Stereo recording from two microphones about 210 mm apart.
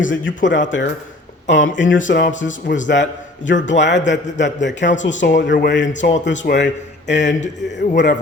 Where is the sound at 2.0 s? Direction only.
55° left (ahead or behind).